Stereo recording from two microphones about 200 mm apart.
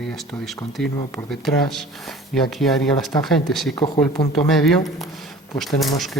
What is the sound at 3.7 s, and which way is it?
Speech, 20° left (ahead or behind).